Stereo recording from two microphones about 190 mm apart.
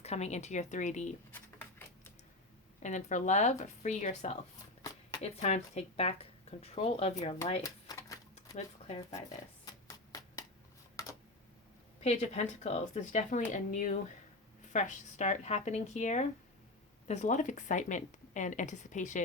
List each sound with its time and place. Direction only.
0.0 s speech: 35° left (ahead or behind)
2.8 s speech: 40° left (ahead or behind)
7.6 s a sound: 20° left (ahead or behind)
9.6 s hands: 20° left (ahead or behind)
11.0 s tick: 15° left (ahead or behind)
12.0 s speech: 35° left (ahead or behind)